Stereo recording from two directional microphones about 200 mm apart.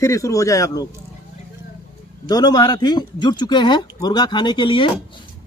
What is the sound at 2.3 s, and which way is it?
Speech, 20° left (ahead or behind).